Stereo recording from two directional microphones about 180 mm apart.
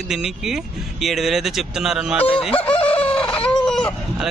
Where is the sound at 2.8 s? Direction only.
30° left (ahead or behind).